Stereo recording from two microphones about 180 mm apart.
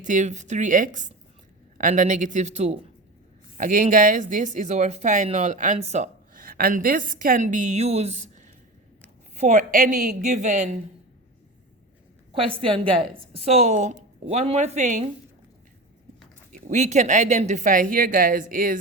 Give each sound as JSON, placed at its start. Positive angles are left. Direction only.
{"t": 0.0, "sound": "speech", "side_deg": -45}
{"t": 12.3, "sound": "a woman's voice", "side_deg": -30}
{"t": 16.5, "sound": "speech", "side_deg": -40}